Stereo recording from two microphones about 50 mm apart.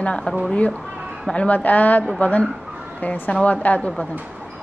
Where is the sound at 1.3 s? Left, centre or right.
Left.